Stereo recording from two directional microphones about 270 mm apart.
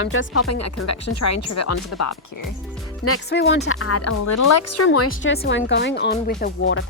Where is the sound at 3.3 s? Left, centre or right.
Left.